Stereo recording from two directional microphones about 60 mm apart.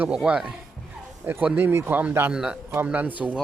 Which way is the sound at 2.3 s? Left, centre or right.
Centre.